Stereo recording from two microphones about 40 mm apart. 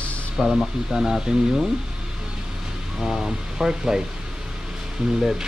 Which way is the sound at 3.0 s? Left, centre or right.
Centre.